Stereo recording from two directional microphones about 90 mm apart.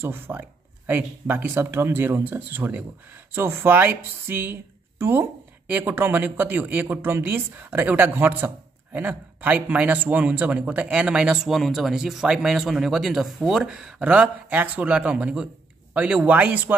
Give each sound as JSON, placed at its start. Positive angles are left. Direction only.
{"t": 0.0, "sound": "a man's voice", "side_deg": -20}